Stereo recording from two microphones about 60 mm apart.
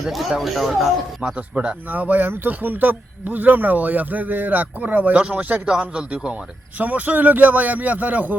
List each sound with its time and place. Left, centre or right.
0.0 s speech: centre
1.4 s speech: right
5.6 s a man's voice: centre